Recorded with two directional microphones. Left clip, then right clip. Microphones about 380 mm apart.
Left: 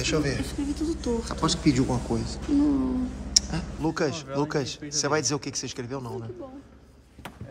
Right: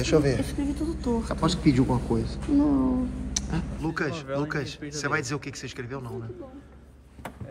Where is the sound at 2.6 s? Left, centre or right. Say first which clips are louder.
Right 1 dB; centre.